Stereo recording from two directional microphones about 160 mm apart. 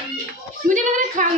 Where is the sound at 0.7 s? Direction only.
55° right (ahead or behind).